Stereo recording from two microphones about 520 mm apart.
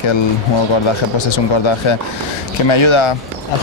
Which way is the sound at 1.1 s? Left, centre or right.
Left.